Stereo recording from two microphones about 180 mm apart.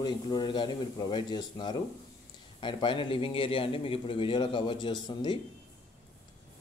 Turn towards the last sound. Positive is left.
turn(degrees=25)  # may be behind; listen again after turning